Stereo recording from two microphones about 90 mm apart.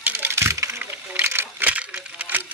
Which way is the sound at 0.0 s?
20° right (ahead or behind).